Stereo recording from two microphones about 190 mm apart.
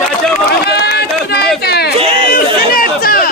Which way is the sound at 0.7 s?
60° left (ahead or behind).